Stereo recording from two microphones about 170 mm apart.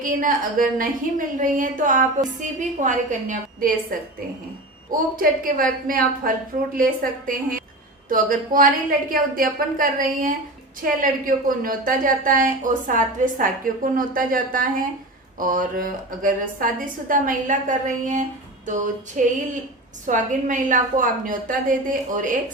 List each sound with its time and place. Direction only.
0.0 s a woman's voice: 55° right (ahead or behind)
4.9 s a woman's voice: 55° right (ahead or behind)